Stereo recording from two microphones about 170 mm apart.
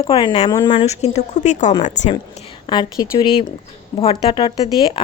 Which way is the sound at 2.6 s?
25° left (ahead or behind).